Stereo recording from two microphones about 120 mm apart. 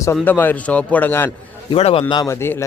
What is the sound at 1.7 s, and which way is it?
Speech, 55° left (ahead or behind).